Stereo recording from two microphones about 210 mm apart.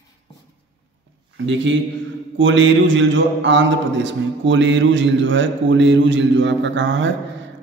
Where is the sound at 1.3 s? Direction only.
60° right (ahead or behind).